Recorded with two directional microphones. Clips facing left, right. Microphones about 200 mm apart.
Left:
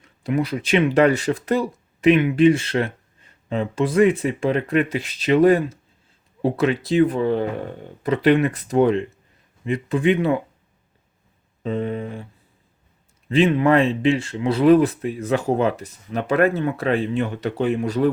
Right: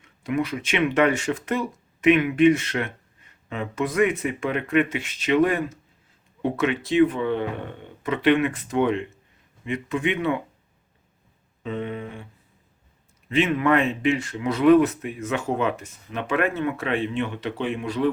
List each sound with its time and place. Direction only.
0.0 s speech: 35° left (ahead or behind)
11.6 s speech: 35° left (ahead or behind)
13.2 s speech: 35° left (ahead or behind)